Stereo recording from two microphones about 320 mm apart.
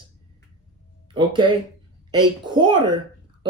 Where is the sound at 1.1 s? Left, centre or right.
Centre.